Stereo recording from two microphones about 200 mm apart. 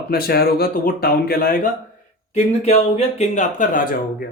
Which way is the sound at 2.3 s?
35° left (ahead or behind).